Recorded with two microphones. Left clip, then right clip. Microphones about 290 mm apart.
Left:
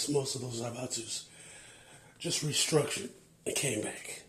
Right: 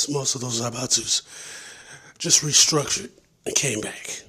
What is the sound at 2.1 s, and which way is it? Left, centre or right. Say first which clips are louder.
A man's voice: right 14 dB; right.